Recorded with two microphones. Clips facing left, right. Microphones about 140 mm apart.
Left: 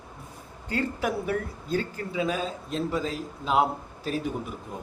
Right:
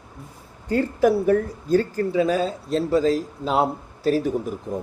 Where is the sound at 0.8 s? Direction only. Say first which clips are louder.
Right 9 dB; 35° right (ahead or behind).